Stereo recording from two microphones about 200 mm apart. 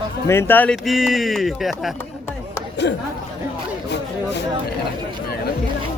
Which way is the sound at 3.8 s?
60° left (ahead or behind).